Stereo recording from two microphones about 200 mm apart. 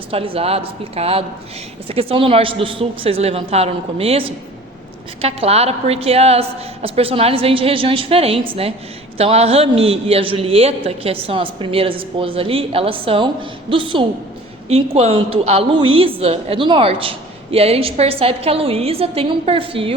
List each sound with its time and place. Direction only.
0.1 s a man's voice: 30° right (ahead or behind)